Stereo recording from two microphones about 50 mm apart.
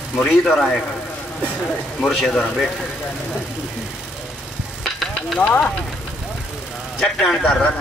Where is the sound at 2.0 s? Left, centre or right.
Centre.